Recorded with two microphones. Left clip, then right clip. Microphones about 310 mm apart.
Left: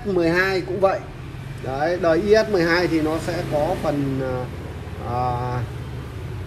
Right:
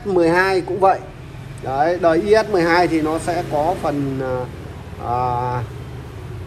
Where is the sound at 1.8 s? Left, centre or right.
Right.